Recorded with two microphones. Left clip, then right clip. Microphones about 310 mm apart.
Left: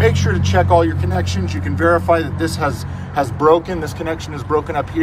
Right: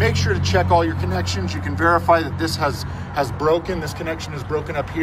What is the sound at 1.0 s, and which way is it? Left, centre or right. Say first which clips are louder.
Speech: left 2 dB; right.